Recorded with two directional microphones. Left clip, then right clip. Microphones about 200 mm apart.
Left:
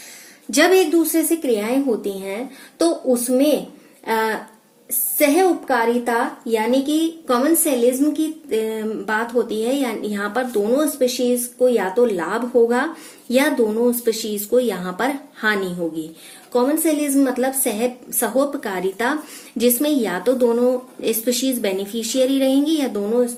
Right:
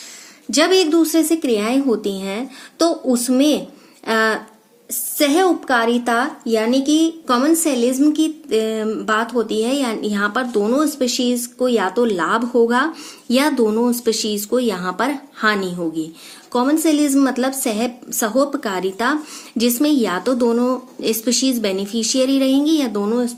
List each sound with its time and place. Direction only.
0.5 s a woman's voice: 35° right (ahead or behind)